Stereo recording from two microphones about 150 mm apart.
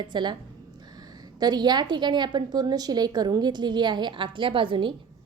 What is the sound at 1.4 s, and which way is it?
A woman's voice, 30° right (ahead or behind).